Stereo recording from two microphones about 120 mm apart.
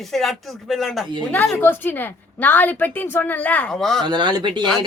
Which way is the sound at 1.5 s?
15° left (ahead or behind).